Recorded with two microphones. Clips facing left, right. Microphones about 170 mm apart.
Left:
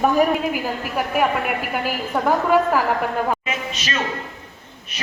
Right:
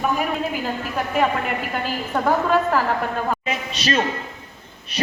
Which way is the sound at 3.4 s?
35° right (ahead or behind).